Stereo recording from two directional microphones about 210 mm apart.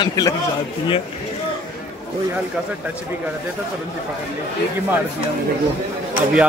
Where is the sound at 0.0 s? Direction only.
20° left (ahead or behind).